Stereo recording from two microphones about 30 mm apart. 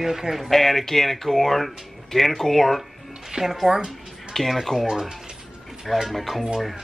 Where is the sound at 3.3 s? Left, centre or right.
Centre.